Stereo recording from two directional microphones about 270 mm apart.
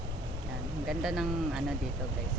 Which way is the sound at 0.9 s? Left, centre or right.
Centre.